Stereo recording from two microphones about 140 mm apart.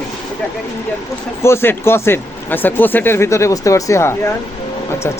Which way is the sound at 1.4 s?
20° left (ahead or behind).